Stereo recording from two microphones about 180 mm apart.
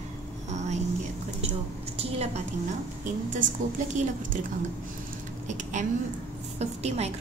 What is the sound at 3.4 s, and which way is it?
Speech, 45° right (ahead or behind).